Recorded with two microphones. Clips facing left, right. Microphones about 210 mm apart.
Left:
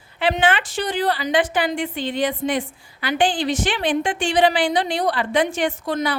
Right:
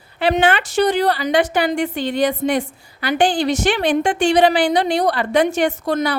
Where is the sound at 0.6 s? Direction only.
70° right (ahead or behind).